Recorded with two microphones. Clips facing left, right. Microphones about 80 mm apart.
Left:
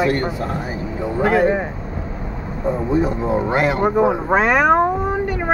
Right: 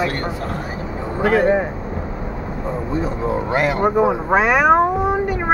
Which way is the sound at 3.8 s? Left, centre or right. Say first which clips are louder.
Even; centre.